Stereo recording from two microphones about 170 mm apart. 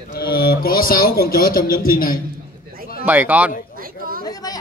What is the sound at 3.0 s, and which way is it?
Speech, 10° right (ahead or behind).